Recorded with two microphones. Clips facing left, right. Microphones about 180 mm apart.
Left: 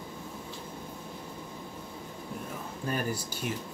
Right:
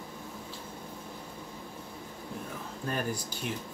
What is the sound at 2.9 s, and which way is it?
Speech, 5° left (ahead or behind).